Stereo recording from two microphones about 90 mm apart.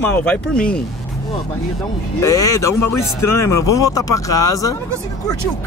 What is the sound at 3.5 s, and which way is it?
Speech, 40° left (ahead or behind).